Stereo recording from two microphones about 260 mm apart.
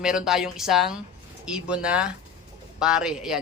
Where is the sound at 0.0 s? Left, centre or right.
Centre.